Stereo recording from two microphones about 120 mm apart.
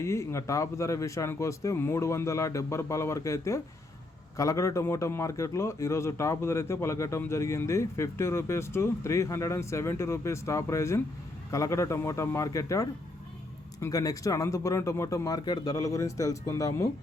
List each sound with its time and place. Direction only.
0.0 s speech: 25° left (ahead or behind)